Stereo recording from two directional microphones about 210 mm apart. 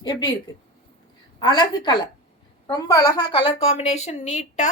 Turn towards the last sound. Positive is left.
turn(degrees=35)  # may be behind; listen again after turning